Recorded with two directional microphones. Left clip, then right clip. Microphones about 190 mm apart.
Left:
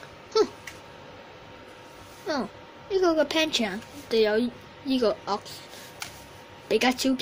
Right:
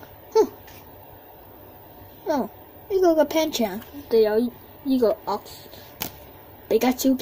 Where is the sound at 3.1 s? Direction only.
10° right (ahead or behind).